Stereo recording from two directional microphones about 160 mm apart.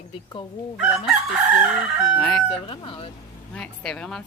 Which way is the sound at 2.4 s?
35° left (ahead or behind).